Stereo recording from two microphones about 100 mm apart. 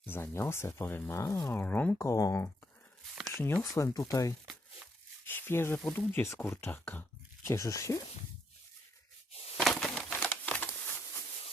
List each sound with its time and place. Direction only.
0.0 s speech: 25° left (ahead or behind)
1.5 s speech: 15° left (ahead or behind)
2.0 s speech: 35° left (ahead or behind)
5.2 s a sound: 25° left (ahead or behind)
6.1 s speech: 25° left (ahead or behind)
7.4 s speech: 30° left (ahead or behind)
9.6 s a sound: centre (ahead or behind)
10.1 s crumpling: 15° left (ahead or behind)